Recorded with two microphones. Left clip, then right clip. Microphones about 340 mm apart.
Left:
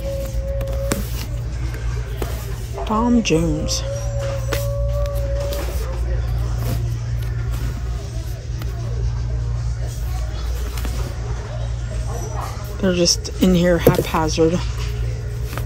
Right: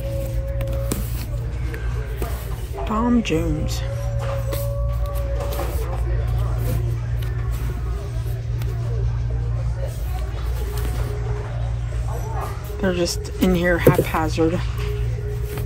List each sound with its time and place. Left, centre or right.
2.9 s speech: centre
12.8 s speech: centre